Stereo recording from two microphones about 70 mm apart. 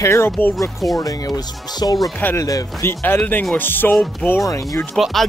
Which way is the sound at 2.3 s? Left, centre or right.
Left.